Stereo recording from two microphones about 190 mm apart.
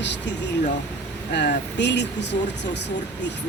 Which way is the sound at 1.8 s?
65° left (ahead or behind).